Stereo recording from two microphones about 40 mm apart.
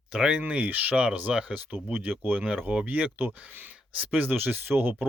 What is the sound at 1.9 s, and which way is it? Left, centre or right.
Speech, right.